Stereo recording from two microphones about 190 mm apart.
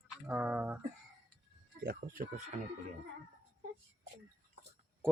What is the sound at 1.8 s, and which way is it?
Speech, 50° right (ahead or behind).